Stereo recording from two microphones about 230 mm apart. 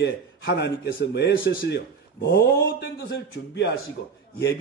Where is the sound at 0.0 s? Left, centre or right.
Left.